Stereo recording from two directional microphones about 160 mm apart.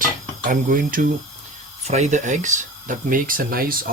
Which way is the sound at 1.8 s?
45° right (ahead or behind).